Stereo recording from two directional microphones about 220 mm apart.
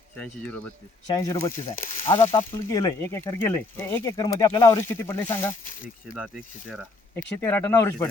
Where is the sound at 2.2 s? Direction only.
15° left (ahead or behind).